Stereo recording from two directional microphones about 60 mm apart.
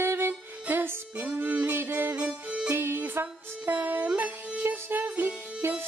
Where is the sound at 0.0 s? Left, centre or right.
Right.